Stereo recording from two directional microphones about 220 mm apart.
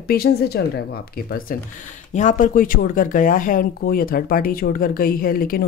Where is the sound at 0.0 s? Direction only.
45° left (ahead or behind).